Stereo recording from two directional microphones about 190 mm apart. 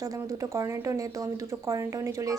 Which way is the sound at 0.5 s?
15° right (ahead or behind).